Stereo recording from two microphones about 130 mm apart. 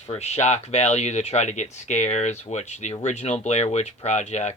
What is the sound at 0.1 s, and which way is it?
Speech, 55° left (ahead or behind).